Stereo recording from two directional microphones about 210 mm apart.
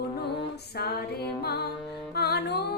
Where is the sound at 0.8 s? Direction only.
50° left (ahead or behind).